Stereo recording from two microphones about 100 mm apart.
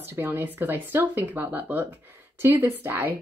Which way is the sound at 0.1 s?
25° right (ahead or behind).